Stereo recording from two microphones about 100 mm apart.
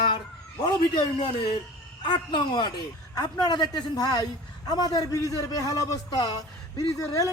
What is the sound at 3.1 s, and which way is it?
A man's voice, 40° left (ahead or behind).